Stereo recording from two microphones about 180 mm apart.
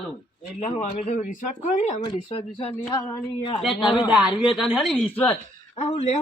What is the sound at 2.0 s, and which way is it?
Speech, 30° left (ahead or behind).